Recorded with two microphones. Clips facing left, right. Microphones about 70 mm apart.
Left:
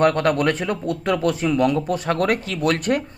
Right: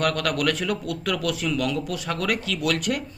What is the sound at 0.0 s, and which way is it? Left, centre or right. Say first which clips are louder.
Speech: left 6 dB; left.